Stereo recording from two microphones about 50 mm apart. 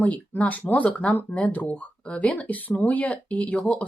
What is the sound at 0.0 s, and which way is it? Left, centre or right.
Speech, left.